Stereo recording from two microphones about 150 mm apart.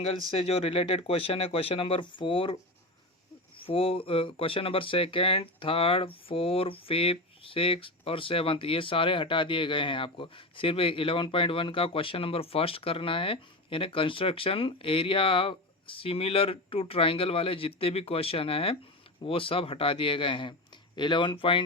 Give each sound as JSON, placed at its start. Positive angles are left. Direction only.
{"t": 0.0, "sound": "speech", "side_deg": 40}
{"t": 3.6, "sound": "speech", "side_deg": 40}